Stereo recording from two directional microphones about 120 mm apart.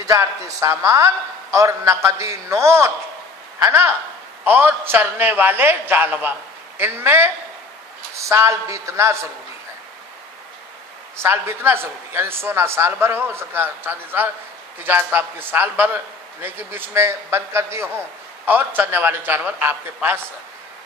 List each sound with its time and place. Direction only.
0.0 s a man's voice: 25° right (ahead or behind)
11.2 s a man's voice: 20° right (ahead or behind)